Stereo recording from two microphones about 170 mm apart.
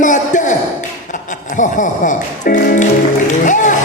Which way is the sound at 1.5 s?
50° left (ahead or behind).